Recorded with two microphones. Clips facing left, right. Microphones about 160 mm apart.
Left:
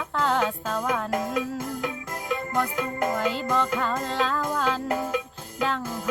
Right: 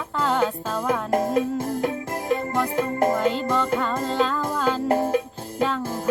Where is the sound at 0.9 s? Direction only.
30° right (ahead or behind).